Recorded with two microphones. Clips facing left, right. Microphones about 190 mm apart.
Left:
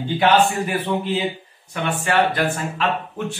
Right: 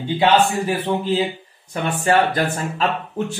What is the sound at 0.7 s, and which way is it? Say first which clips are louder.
Speech: right 2 dB; 35° right (ahead or behind).